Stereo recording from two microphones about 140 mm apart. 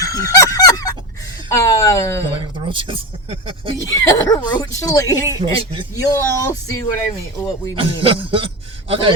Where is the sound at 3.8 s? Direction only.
20° left (ahead or behind).